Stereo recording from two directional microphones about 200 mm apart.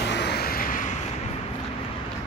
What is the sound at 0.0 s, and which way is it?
Vehicle, 60° left (ahead or behind).